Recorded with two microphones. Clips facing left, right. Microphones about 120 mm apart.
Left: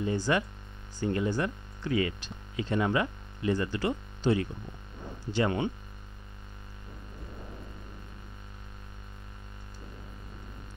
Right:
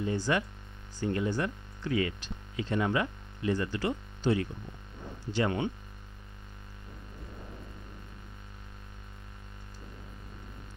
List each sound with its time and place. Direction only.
0.0 s speech: 20° left (ahead or behind)